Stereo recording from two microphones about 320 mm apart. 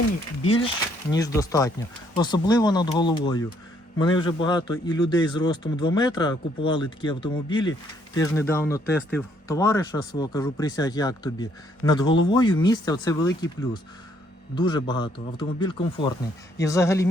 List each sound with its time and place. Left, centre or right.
0.4 s a man's voice: centre
14.5 s a man's voice: centre